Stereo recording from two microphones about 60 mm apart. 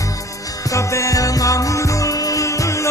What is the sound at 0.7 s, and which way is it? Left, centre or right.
Music, left.